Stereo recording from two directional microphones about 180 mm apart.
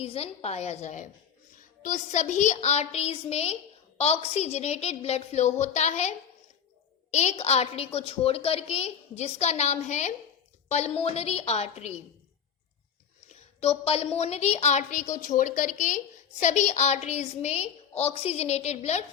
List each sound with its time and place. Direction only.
0.0 s a woman's voice: 35° left (ahead or behind)
13.2 s a woman's voice: 35° left (ahead or behind)